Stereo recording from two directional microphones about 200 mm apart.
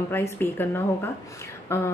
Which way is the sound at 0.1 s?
10° left (ahead or behind).